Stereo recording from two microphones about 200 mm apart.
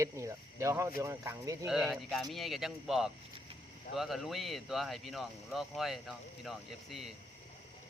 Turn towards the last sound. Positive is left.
turn(degrees=0)  # may be behind; listen again after turning